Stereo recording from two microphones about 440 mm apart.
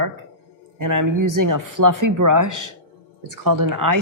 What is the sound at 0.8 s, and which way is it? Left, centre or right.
A woman's voice, right.